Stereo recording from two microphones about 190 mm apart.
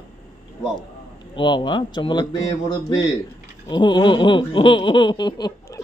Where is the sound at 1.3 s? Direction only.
25° left (ahead or behind).